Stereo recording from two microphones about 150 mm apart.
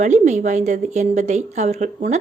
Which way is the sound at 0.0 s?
55° right (ahead or behind).